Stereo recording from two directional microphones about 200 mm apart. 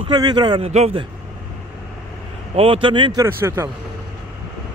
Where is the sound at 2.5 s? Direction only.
25° right (ahead or behind); by 3.6 s 10° right (ahead or behind).